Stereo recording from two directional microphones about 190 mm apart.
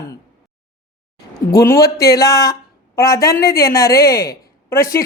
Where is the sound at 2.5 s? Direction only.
15° left (ahead or behind).